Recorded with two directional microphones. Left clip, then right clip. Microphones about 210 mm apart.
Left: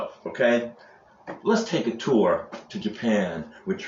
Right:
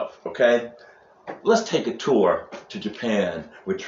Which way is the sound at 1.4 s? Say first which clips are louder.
Right 4 dB; 30° left (ahead or behind).